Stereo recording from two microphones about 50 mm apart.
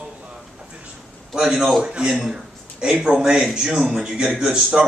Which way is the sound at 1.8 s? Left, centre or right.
Centre.